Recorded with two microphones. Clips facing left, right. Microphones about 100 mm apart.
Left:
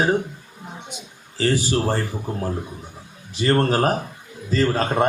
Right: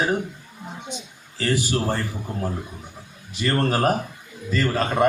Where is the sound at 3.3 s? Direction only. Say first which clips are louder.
Left 3 dB; 30° left (ahead or behind).